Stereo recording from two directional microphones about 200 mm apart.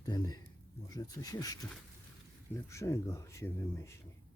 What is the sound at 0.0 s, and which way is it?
Speech, 20° left (ahead or behind).